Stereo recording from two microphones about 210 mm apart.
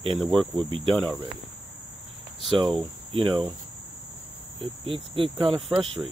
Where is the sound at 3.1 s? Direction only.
25° right (ahead or behind).